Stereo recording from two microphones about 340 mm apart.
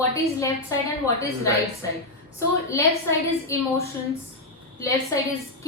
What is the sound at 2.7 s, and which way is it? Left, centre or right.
Speech, centre.